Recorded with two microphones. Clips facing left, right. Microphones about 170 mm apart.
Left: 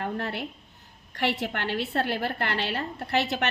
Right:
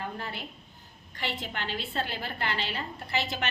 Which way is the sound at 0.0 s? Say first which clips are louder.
Left 6 dB; 65° left (ahead or behind).